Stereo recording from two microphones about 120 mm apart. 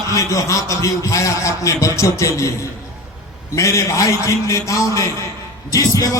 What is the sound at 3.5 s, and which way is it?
Speech, 25° left (ahead or behind).